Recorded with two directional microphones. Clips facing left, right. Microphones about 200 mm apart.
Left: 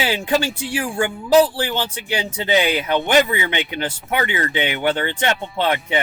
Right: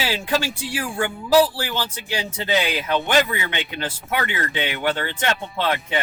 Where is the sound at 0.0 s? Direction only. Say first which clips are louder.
Left 3 dB; 20° left (ahead or behind).